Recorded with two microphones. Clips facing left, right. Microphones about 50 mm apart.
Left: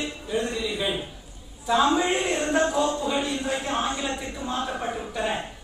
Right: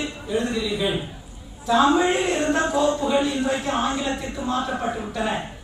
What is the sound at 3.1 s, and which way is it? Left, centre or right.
A man's voice, centre.